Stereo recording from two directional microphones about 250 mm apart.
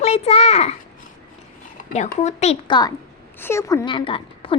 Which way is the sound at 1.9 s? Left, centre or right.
Left.